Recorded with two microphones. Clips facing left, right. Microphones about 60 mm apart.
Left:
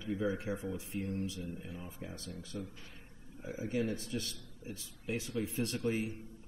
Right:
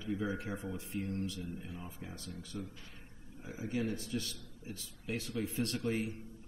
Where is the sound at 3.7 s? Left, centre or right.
Left.